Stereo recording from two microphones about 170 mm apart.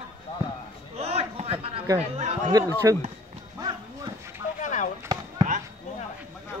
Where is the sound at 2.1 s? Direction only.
40° right (ahead or behind).